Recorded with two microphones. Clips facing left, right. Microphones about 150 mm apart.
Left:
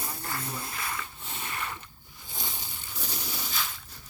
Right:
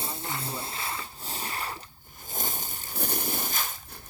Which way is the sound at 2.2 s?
45° right (ahead or behind).